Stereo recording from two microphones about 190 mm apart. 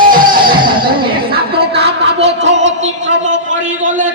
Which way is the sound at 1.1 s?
55° right (ahead or behind).